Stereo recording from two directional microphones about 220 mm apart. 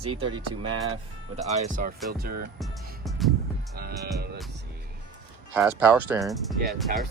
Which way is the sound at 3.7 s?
45° right (ahead or behind).